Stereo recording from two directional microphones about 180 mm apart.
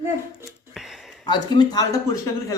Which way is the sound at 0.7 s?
Centre (ahead or behind).